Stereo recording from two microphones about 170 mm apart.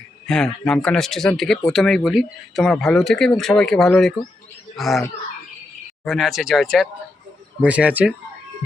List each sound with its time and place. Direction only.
0.3 s speech: 5° left (ahead or behind)
6.1 s speech: centre (ahead or behind)